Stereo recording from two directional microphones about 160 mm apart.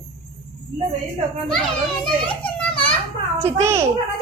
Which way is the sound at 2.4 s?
5° left (ahead or behind).